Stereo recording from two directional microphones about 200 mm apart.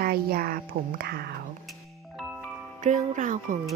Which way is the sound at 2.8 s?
35° right (ahead or behind).